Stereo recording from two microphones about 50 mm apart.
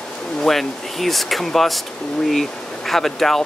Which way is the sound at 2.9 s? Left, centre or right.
Centre.